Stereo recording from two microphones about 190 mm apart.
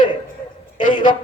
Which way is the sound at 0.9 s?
25° left (ahead or behind).